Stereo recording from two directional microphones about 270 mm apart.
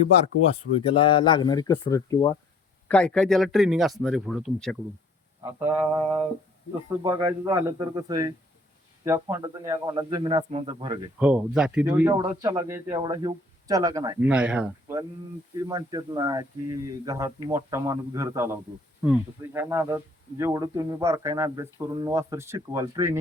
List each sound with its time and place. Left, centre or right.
0.5 s speech: centre
11.2 s speech: centre